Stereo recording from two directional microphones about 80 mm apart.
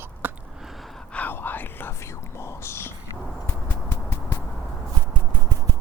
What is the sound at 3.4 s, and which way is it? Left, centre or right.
Clip-clop, left.